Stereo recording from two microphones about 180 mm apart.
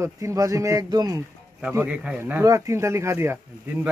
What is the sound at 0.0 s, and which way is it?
Speech, 15° right (ahead or behind).